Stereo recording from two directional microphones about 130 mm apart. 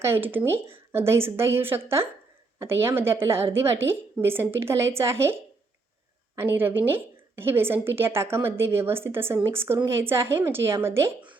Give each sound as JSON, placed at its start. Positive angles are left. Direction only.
{"t": 0.0, "sound": "a woman's voice", "side_deg": -15}